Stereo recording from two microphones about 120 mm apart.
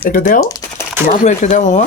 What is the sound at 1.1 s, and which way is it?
Speech, 90° left.